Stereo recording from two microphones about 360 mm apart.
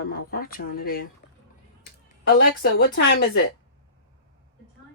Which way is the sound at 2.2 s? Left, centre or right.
Left.